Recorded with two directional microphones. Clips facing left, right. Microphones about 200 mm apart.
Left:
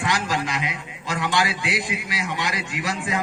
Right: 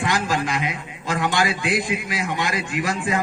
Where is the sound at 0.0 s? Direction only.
50° right (ahead or behind).